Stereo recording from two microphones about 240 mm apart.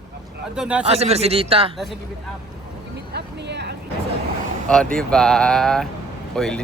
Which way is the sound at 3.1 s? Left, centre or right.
Right.